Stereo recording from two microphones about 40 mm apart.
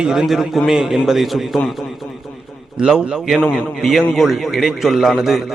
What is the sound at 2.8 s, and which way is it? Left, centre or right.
Speech, right.